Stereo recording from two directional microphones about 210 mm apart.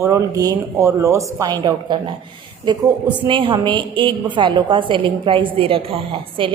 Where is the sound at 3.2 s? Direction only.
25° right (ahead or behind).